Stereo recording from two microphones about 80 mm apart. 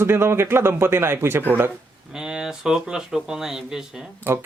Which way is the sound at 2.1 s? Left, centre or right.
Centre.